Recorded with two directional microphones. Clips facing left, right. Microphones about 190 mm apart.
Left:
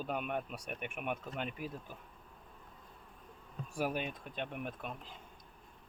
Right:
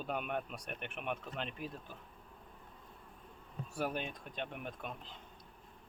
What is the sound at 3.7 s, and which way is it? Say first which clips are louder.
Speech: left 2 dB; 10° left (ahead or behind).